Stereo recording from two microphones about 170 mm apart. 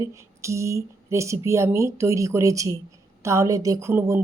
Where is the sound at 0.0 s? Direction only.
15° right (ahead or behind).